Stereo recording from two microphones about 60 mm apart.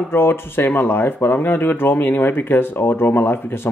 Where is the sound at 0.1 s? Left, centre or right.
Left.